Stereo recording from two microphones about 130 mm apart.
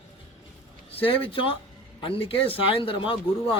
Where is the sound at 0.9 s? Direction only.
45° left (ahead or behind).